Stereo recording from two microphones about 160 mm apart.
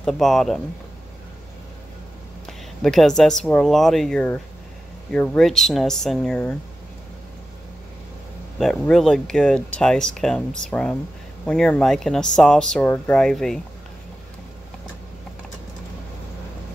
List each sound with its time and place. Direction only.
0.0 s speech: centre (ahead or behind)
2.4 s speech: centre (ahead or behind)
8.5 s speech: centre (ahead or behind)